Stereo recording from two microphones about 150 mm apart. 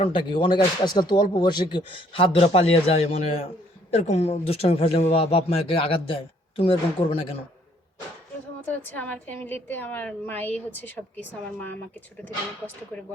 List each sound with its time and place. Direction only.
0.0 s speech: 35° left (ahead or behind)
8.6 s a woman's voice: 10° left (ahead or behind)